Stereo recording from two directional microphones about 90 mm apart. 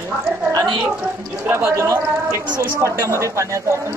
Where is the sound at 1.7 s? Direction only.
35° right (ahead or behind).